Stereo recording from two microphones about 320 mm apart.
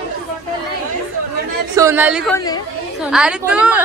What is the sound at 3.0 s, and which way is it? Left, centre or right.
Speech, centre.